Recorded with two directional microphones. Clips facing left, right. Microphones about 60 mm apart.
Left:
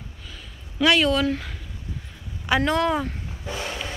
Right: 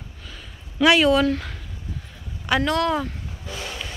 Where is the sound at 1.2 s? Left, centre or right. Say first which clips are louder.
Right 2 dB; centre.